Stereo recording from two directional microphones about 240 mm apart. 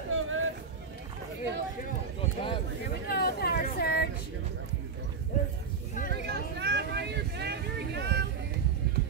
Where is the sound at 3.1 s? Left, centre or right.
Left.